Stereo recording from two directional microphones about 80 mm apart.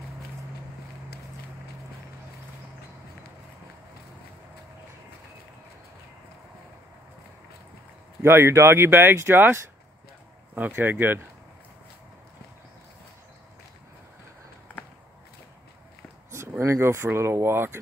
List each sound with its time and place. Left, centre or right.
8.2 s speech: right
16.3 s speech: right